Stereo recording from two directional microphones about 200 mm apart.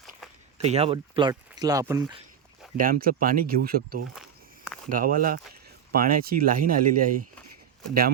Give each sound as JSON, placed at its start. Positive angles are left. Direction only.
{"t": 0.6, "sound": "speech", "side_deg": -30}
{"t": 2.7, "sound": "speech", "side_deg": -45}
{"t": 4.1, "sound": "walk", "side_deg": 0}
{"t": 4.9, "sound": "speech", "side_deg": -45}